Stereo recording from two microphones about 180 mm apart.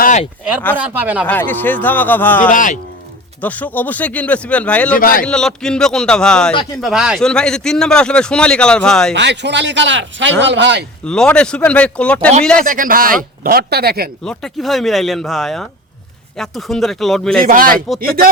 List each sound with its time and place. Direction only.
0.0 s a sound: 45° left (ahead or behind)
0.8 s speech: 10° right (ahead or behind)
1.3 s speech: 10° left (ahead or behind)
2.5 s speech: 45° left (ahead or behind)
3.4 s speech: 10° left (ahead or behind)
4.9 s speech: 50° left (ahead or behind)
5.2 s a man's voice: 5° left (ahead or behind)
9.1 s speech: 75° right (ahead or behind); by 10.3 s 90° right
10.4 s speech: 80° right
11.0 s a man's voice: 5° left (ahead or behind)
12.6 s speech: 50° right (ahead or behind)
14.3 s a man's voice: centre (ahead or behind)
17.4 s speech: 50° right (ahead or behind)